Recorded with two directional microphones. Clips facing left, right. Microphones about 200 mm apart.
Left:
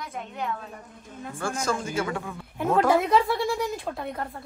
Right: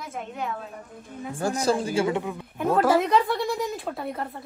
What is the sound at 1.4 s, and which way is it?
Speech, 35° right (ahead or behind).